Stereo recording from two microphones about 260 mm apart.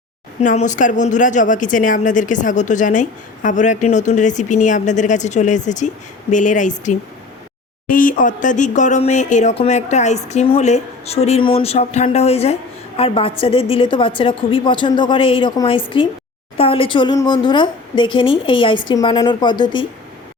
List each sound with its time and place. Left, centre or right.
0.4 s speech: left